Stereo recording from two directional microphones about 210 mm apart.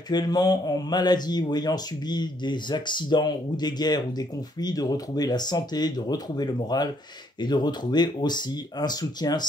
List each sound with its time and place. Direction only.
0.1 s speech: 20° left (ahead or behind)